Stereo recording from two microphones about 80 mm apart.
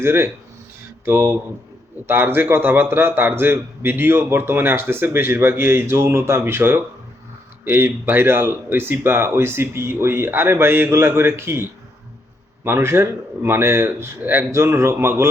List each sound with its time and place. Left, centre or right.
0.0 s a man's voice: right